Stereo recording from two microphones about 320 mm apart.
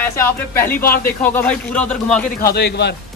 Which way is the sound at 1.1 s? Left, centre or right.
Centre.